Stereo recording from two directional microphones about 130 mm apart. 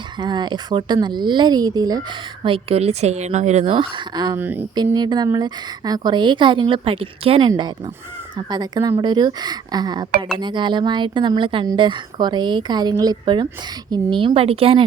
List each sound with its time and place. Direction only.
0.2 s a woman's voice: 35° right (ahead or behind)
2.4 s a woman's voice: 45° right (ahead or behind)
3.7 s a woman's voice: 40° right (ahead or behind)
4.4 s speech: 15° right (ahead or behind)
4.7 s a woman's voice: 35° right (ahead or behind)